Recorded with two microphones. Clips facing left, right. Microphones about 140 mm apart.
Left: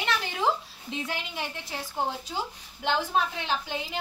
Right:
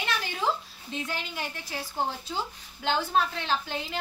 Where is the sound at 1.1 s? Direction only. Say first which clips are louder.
Left 1 dB; 25° left (ahead or behind).